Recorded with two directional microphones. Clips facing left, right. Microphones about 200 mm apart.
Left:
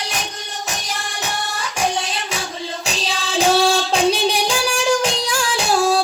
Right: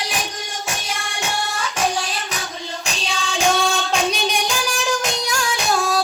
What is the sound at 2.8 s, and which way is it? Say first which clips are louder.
Music: even; 35° left (ahead or behind).